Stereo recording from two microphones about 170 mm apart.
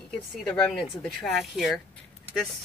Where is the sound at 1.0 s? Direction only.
Centre (ahead or behind).